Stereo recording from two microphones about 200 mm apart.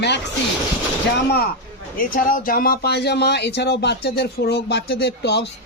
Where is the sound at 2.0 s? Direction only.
45° left (ahead or behind).